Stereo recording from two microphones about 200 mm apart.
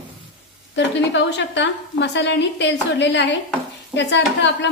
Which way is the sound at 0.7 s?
65° left (ahead or behind).